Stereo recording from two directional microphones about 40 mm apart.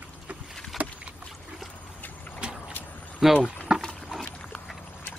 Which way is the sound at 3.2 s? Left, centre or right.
Centre.